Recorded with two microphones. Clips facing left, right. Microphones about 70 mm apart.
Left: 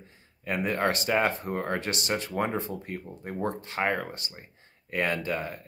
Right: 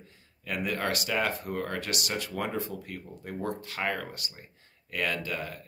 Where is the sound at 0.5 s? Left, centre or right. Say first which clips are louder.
Left 4 dB; left.